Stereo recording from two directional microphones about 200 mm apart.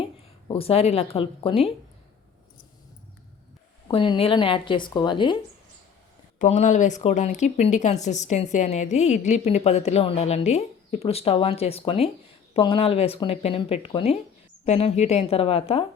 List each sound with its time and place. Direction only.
0.0 s a woman's voice: 25° left (ahead or behind)
3.8 s speech: 25° left (ahead or behind)
6.4 s a woman's voice: 40° left (ahead or behind)